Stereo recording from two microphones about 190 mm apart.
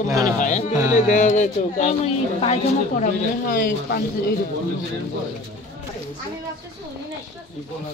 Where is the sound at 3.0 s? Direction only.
50° left (ahead or behind).